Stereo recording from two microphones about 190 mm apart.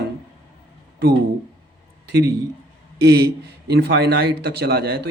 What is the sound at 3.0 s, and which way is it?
Speech, 55° right (ahead or behind).